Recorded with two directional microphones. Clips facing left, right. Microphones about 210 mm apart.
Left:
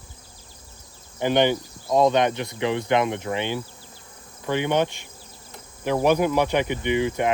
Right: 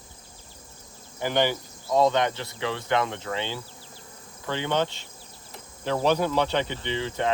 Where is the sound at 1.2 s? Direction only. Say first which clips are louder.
Left 5 dB; 20° left (ahead or behind).